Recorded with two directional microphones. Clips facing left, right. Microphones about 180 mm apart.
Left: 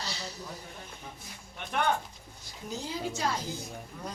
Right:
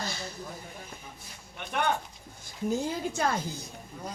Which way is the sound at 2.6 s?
50° right (ahead or behind).